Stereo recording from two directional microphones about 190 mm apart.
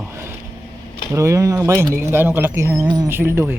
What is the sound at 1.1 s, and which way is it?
Speech, 15° right (ahead or behind).